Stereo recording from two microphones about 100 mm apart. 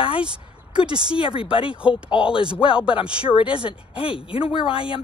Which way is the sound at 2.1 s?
60° left (ahead or behind).